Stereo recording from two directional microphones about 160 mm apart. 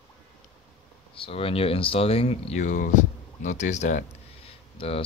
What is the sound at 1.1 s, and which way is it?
Speech, 35° left (ahead or behind).